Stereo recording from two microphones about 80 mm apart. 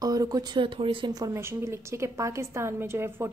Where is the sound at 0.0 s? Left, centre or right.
Right.